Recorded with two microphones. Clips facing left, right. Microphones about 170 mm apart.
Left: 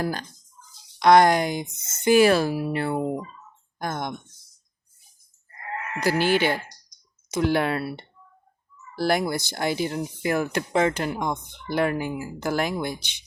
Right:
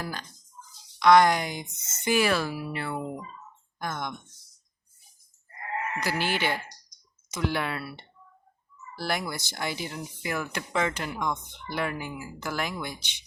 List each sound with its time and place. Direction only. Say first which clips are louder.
0.0 s speech: left 8 dB; 45° left (ahead or behind)
6.1 s speech: left 8 dB; 40° left (ahead or behind)
12.9 s speech: left 7 dB; 10° left (ahead or behind)